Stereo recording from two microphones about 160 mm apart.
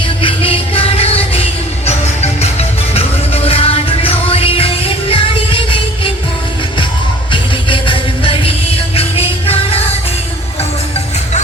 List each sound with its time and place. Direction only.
0.2 s music: 35° left (ahead or behind)
7.7 s music: 35° left (ahead or behind)